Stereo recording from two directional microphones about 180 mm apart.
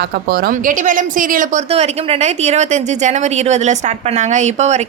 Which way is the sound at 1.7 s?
35° right (ahead or behind).